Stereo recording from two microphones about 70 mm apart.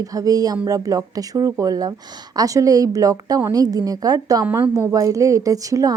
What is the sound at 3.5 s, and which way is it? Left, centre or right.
Speech, right.